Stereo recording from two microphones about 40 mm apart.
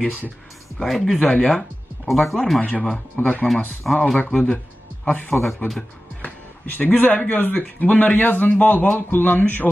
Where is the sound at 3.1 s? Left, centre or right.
Left.